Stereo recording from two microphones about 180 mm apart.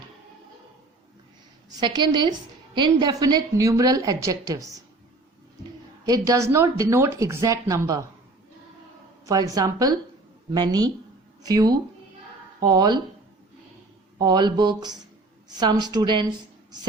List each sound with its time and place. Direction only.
1.7 s a woman's voice: 25° right (ahead or behind)
6.1 s speech: 20° right (ahead or behind)
9.2 s a woman's voice: 20° right (ahead or behind)
14.2 s a woman's voice: 25° right (ahead or behind)